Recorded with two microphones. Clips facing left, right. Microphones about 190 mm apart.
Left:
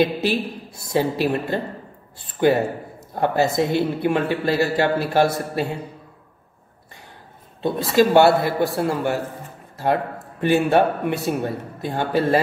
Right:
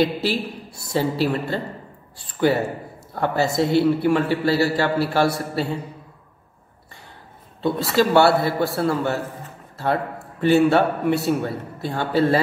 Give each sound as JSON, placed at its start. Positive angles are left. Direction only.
{"t": 0.0, "sound": "a man's voice", "side_deg": 20}
{"t": 7.6, "sound": "a man's voice", "side_deg": 20}
{"t": 10.4, "sound": "a man's voice", "side_deg": 15}